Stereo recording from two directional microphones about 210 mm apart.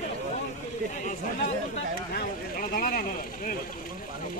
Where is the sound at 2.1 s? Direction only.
40° left (ahead or behind).